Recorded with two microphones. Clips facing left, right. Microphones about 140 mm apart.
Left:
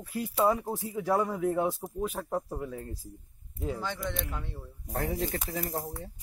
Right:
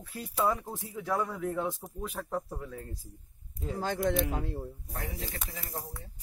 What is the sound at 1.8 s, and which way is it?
Speech, 30° left (ahead or behind).